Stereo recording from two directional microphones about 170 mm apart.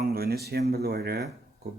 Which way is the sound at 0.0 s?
65° right (ahead or behind).